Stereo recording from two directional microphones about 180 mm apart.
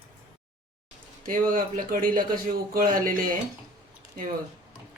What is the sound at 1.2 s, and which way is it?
A man's voice, 50° right (ahead or behind).